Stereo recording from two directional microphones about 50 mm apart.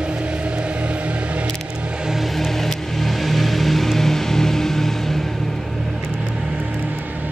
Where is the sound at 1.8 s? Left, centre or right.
Right.